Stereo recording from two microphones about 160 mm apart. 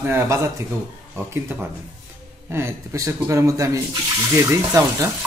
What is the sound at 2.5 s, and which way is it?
Speech, 15° right (ahead or behind).